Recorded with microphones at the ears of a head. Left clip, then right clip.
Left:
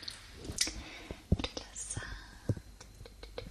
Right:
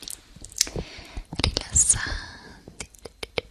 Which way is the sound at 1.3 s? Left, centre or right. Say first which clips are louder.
Right 16 dB; right.